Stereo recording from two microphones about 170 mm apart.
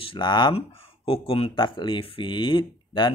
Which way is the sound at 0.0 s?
30° left (ahead or behind).